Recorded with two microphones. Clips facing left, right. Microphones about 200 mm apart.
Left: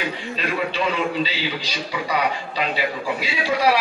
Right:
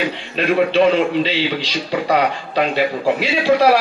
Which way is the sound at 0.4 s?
65° right (ahead or behind).